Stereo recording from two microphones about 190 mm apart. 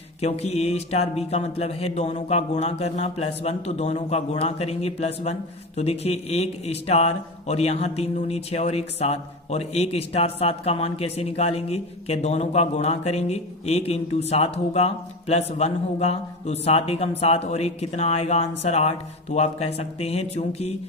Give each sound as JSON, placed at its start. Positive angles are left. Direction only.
{"t": 0.2, "sound": "speech", "side_deg": 35}